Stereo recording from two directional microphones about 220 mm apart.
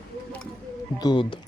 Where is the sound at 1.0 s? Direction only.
20° left (ahead or behind).